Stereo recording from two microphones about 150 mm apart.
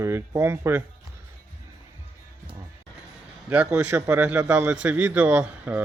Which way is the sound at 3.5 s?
10° right (ahead or behind).